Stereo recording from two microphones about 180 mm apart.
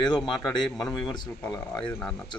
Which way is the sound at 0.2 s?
5° left (ahead or behind).